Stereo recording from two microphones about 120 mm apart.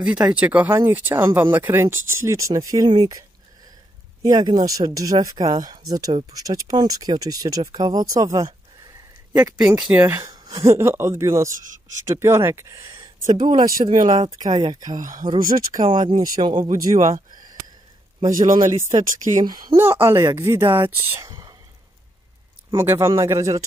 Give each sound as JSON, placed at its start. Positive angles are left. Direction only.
{"t": 0.0, "sound": "speech", "side_deg": -10}
{"t": 9.3, "sound": "speech", "side_deg": -10}
{"t": 10.3, "sound": "speech", "side_deg": -30}
{"t": 13.5, "sound": "speech", "side_deg": -45}
{"t": 13.9, "sound": "speech", "side_deg": -90}
{"t": 14.4, "sound": "speech", "side_deg": -40}
{"t": 14.9, "sound": "speech", "side_deg": -90}
{"t": 15.7, "sound": "speech", "side_deg": -45}
{"t": 16.6, "sound": "speech", "side_deg": -80}
{"t": 18.2, "sound": "speech", "side_deg": -90}
{"t": 18.7, "sound": "speech", "side_deg": -20}
{"t": 22.8, "sound": "speech", "side_deg": -20}